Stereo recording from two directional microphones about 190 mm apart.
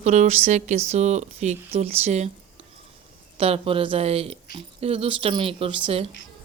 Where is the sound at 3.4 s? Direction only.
30° right (ahead or behind).